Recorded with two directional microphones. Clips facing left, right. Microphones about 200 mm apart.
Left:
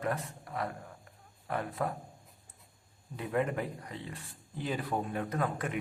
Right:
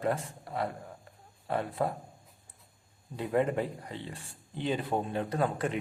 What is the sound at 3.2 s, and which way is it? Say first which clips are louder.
Speech: right 4 dB; 30° right (ahead or behind).